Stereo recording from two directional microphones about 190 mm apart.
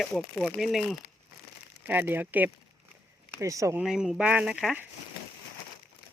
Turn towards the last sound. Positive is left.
turn(degrees=-5)  # may be behind; listen again after turning